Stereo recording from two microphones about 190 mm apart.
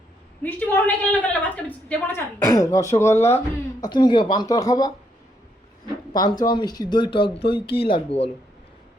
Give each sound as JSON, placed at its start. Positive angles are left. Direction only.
{"t": 0.4, "sound": "a woman's voice", "side_deg": 10}
{"t": 3.1, "sound": "speech", "side_deg": 35}
{"t": 3.8, "sound": "speech", "side_deg": 20}
{"t": 6.1, "sound": "speech", "side_deg": 20}